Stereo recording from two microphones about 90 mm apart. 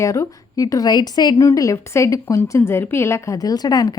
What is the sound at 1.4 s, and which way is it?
A woman's voice, 35° left (ahead or behind).